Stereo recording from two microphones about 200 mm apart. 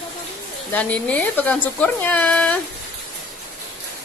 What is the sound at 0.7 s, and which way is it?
Speech, 5° left (ahead or behind).